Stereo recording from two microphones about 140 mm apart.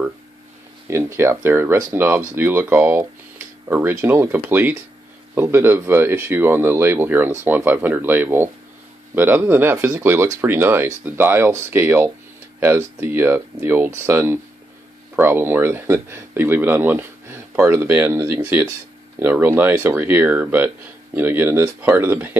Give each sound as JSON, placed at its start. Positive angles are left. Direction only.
{"t": 0.8, "sound": "speech", "side_deg": -20}